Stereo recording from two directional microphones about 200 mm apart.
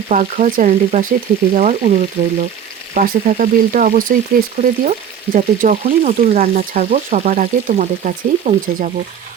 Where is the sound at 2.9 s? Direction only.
45° right (ahead or behind).